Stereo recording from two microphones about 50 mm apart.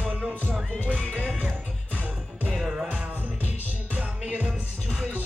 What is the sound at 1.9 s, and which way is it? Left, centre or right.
Music, right.